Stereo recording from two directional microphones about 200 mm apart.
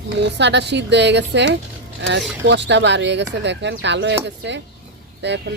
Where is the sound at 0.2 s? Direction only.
60° right (ahead or behind).